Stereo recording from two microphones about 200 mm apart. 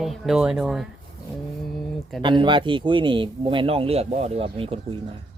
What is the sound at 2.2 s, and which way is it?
Speech, 25° right (ahead or behind).